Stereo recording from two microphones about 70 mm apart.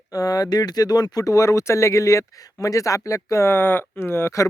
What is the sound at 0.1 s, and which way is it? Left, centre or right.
Speech, left.